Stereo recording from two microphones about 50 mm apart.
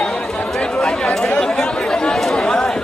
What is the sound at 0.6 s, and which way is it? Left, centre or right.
Chatter, centre.